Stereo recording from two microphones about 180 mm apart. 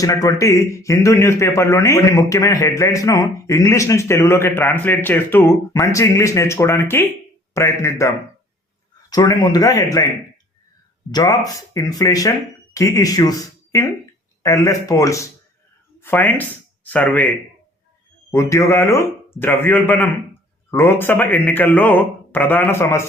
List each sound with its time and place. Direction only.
0.0 s speech: 20° left (ahead or behind)
11.1 s speech: 20° left (ahead or behind)
14.4 s speech: 15° left (ahead or behind)